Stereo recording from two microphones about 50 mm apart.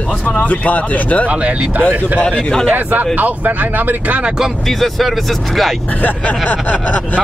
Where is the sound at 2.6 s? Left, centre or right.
Right.